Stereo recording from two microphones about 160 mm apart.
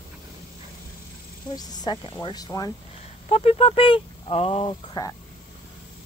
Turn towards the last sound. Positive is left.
turn(degrees=25)  # may be behind; listen again after turning